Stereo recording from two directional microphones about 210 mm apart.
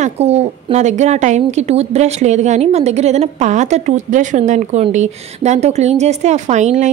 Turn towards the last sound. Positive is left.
turn(degrees=-35)  # may be behind; listen again after turning